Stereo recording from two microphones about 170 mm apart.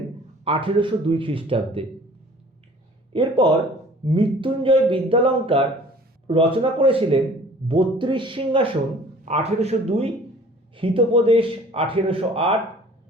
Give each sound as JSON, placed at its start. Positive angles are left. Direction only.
{"t": 0.4, "sound": "speech", "side_deg": -30}
{"t": 3.1, "sound": "speech", "side_deg": -30}